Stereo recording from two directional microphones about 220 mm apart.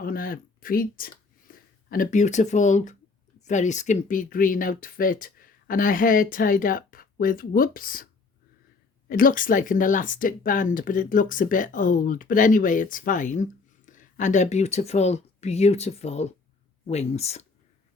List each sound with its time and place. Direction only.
0.0 s speech: 40° left (ahead or behind)
9.0 s speech: 40° left (ahead or behind)